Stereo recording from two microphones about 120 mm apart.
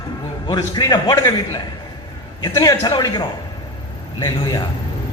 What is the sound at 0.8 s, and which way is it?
A man's voice, 35° left (ahead or behind).